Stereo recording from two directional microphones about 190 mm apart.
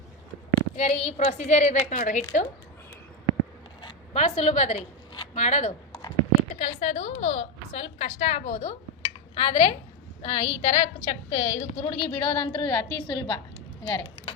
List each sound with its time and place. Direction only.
0.8 s a woman's voice: 35° left (ahead or behind)
3.8 s zipper: 30° left (ahead or behind)
6.6 s a woman's voice: 35° left (ahead or behind)